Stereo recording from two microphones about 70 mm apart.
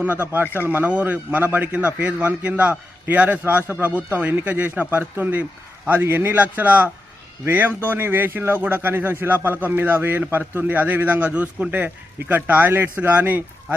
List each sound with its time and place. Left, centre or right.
0.0 s a man's voice: right